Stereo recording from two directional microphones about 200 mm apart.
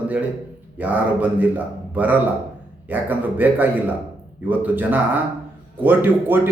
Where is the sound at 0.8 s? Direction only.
10° right (ahead or behind).